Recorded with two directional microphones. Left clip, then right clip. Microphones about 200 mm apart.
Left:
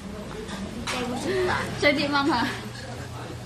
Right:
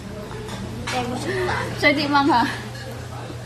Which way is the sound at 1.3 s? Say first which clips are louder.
Right 1 dB; 25° right (ahead or behind).